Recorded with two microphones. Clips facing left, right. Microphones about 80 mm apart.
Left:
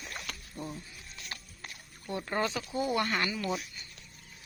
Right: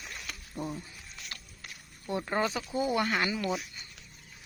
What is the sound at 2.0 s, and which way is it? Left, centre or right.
Speech, centre.